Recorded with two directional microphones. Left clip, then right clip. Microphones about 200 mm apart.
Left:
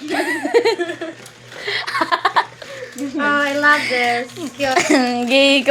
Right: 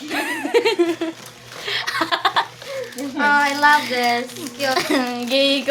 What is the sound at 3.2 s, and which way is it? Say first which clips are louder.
Speech: right 1 dB; 40° right (ahead or behind).